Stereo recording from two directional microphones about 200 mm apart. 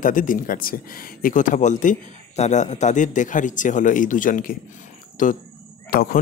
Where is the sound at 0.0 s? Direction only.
40° left (ahead or behind).